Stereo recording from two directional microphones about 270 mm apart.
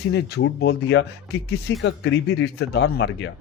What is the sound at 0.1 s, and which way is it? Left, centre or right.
Speech, left.